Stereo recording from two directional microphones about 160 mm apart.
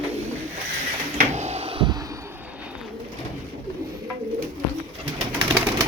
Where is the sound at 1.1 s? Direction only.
45° right (ahead or behind); by 2.1 s 25° right (ahead or behind).